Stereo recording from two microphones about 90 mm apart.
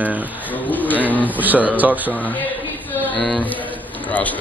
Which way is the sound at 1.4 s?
20° right (ahead or behind).